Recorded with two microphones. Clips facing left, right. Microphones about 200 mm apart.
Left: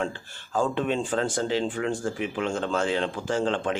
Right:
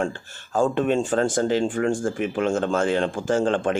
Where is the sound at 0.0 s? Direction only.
50° right (ahead or behind).